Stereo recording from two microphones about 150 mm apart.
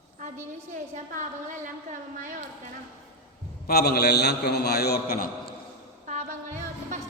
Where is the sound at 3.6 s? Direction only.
90° left.